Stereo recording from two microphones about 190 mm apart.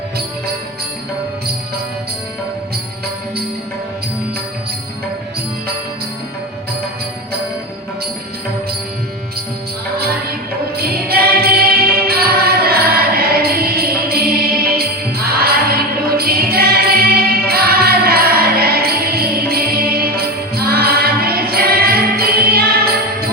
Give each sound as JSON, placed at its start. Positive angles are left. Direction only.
{"t": 10.8, "sound": "music", "side_deg": -55}